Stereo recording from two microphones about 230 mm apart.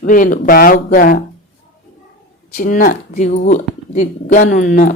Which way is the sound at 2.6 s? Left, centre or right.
Left.